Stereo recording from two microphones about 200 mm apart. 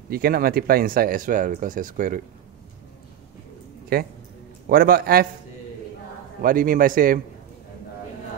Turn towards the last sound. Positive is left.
turn(degrees=-45)  # may be behind; listen again after turning